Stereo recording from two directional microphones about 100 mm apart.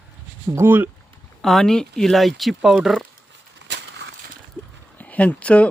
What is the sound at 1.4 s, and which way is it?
Speech, 5° left (ahead or behind).